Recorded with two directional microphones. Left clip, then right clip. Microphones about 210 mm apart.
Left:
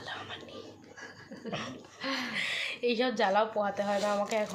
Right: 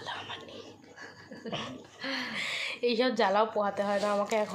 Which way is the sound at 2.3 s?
10° right (ahead or behind).